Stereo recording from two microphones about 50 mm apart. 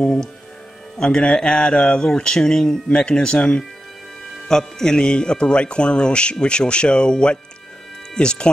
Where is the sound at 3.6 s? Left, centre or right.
Centre.